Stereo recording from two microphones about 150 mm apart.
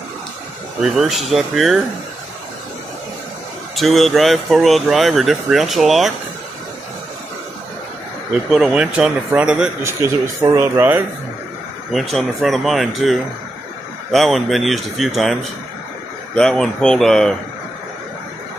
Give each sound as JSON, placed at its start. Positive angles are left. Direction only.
{"t": 0.8, "sound": "speech", "side_deg": 0}
{"t": 3.7, "sound": "speech", "side_deg": 0}
{"t": 8.5, "sound": "speech", "side_deg": -5}
{"t": 11.9, "sound": "speech", "side_deg": 0}
{"t": 16.3, "sound": "speech", "side_deg": 5}